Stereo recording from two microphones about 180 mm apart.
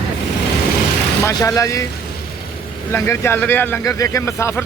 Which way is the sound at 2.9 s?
15° left (ahead or behind).